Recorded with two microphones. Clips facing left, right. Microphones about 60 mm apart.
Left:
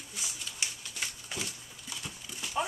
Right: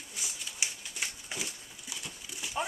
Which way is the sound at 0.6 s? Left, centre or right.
Centre.